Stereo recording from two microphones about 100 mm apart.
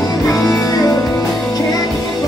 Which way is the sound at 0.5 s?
35° left (ahead or behind).